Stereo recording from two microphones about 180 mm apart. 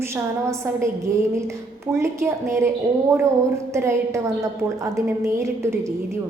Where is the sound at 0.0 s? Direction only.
15° right (ahead or behind).